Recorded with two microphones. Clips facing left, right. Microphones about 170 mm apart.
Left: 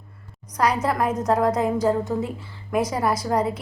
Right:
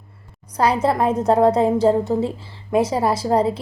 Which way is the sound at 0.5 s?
30° right (ahead or behind).